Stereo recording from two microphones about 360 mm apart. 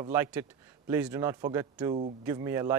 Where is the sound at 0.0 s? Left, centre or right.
Centre.